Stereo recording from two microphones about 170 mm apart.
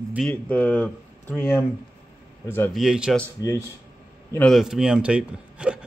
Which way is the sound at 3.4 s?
20° left (ahead or behind).